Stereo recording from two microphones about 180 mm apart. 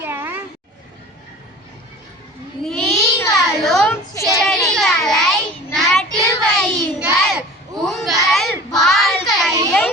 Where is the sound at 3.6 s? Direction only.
Centre (ahead or behind).